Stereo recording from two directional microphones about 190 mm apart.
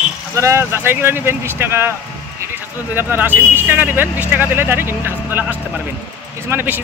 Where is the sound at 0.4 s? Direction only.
15° right (ahead or behind).